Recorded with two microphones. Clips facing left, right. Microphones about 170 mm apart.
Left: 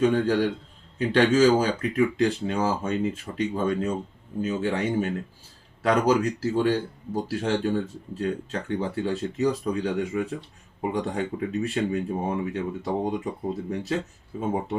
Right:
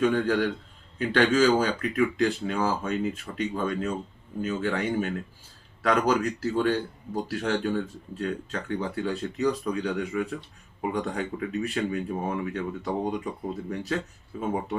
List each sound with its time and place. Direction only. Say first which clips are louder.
0.0 s speech: left 2 dB; 30° left (ahead or behind)